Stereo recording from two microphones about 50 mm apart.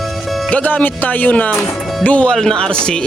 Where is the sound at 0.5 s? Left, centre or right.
Left.